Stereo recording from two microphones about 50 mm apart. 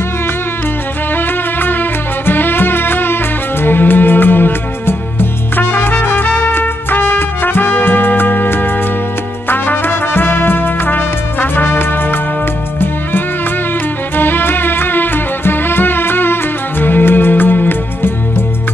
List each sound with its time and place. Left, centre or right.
1.1 s music: left
9.5 s trumpet: left
14.1 s music: left